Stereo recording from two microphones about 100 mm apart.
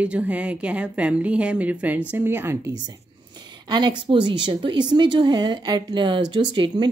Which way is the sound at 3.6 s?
45° right (ahead or behind).